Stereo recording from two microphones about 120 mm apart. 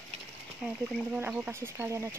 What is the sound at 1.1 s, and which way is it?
Speech, 15° right (ahead or behind).